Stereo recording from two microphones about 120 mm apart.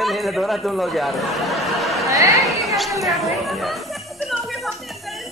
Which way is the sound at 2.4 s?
Centre (ahead or behind).